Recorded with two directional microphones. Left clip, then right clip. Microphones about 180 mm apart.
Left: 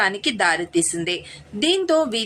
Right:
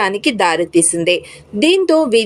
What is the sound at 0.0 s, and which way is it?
A woman's voice, 15° right (ahead or behind).